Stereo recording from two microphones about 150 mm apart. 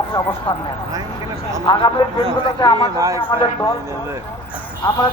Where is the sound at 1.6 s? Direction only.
35° left (ahead or behind).